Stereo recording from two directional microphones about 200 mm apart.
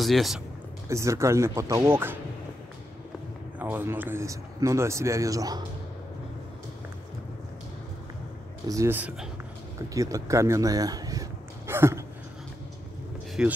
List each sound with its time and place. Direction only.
0.0 s a man's voice: centre (ahead or behind)
0.8 s speech: 15° right (ahead or behind)
3.5 s speech: 10° right (ahead or behind)
8.6 s speech: 15° right (ahead or behind)
13.4 s a man's voice: 5° right (ahead or behind)